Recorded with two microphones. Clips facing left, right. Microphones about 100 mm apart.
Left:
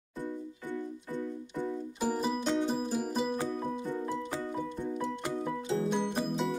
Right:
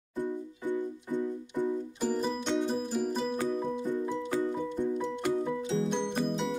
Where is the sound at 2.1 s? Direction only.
5° left (ahead or behind).